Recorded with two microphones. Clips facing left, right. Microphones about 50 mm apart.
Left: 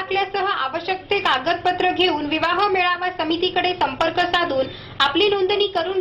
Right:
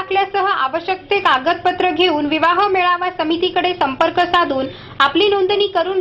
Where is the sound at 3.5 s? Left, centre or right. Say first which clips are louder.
Right 4 dB; centre.